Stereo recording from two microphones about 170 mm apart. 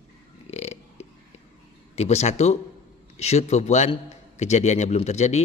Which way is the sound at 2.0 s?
40° left (ahead or behind).